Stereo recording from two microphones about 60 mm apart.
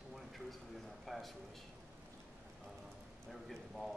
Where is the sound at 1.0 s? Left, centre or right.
Centre.